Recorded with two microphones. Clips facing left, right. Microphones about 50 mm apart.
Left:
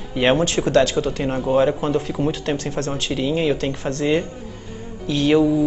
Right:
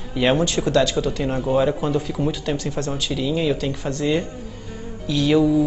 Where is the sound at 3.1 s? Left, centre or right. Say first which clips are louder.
Left 2 dB; left.